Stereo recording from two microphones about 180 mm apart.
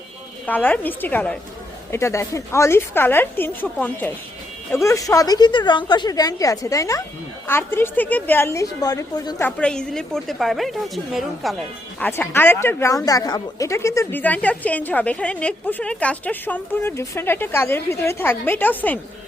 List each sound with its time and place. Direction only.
0.4 s a woman's voice: 10° left (ahead or behind)
9.6 s a woman's voice: 5° left (ahead or behind)
11.9 s a woman's voice: 10° left (ahead or behind)